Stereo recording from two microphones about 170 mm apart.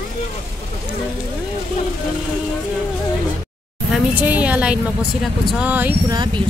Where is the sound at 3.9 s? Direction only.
10° right (ahead or behind).